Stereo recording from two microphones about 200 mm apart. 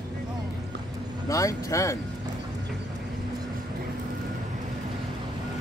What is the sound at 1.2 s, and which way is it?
Speech, 15° left (ahead or behind).